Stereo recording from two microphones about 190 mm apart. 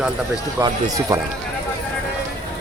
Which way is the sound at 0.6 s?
20° right (ahead or behind).